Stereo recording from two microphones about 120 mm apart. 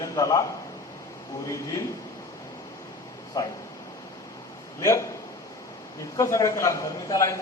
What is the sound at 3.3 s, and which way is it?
Speech, 30° left (ahead or behind).